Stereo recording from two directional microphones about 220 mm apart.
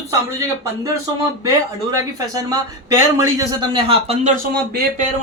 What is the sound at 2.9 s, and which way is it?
Speech, 15° right (ahead or behind).